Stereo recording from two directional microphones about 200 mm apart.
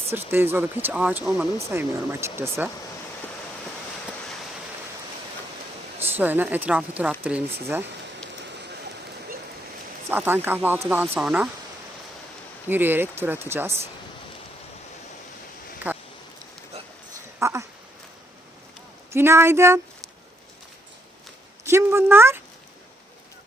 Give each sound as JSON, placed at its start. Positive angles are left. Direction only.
{"t": 0.1, "sound": "speech", "side_deg": -10}
{"t": 6.1, "sound": "speech", "side_deg": -10}
{"t": 10.1, "sound": "speech", "side_deg": -10}
{"t": 12.6, "sound": "speech", "side_deg": -10}
{"t": 16.7, "sound": "a sound", "side_deg": -30}
{"t": 17.4, "sound": "a sound", "side_deg": -15}
{"t": 19.1, "sound": "speech", "side_deg": -15}
{"t": 21.7, "sound": "speech", "side_deg": -15}